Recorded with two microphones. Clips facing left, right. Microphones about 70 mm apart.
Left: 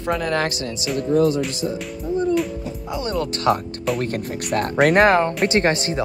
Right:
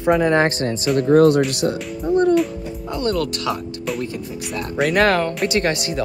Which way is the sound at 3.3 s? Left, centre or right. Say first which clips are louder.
Left 5 dB; left.